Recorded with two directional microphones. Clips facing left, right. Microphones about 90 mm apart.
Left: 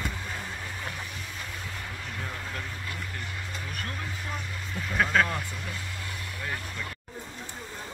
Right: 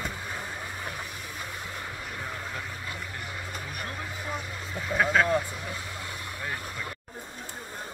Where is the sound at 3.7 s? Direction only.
15° right (ahead or behind).